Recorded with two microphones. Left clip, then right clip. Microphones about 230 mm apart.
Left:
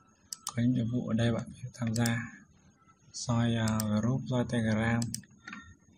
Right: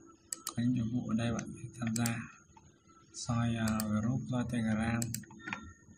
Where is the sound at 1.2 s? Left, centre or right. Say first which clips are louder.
Left 5 dB; left.